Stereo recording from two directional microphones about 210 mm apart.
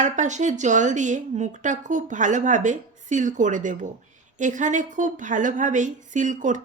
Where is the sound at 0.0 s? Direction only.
35° right (ahead or behind).